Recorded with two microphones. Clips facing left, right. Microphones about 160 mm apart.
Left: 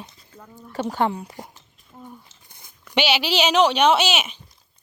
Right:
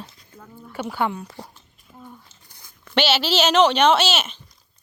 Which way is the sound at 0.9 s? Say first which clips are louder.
Left 2 dB; 35° left (ahead or behind).